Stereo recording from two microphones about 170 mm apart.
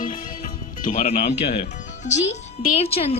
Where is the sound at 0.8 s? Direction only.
50° left (ahead or behind).